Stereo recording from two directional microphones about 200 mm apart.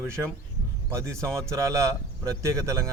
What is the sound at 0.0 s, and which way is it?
Speech, 15° right (ahead or behind).